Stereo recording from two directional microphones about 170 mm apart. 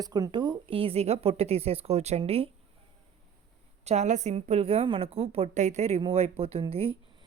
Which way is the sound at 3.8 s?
40° right (ahead or behind).